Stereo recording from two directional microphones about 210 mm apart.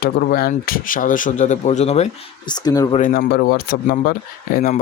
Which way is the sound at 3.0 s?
40° left (ahead or behind).